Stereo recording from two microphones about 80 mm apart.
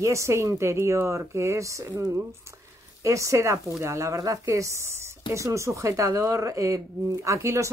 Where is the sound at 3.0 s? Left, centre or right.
Right.